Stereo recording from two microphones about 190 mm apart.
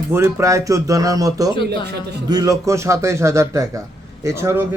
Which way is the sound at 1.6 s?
60° right (ahead or behind).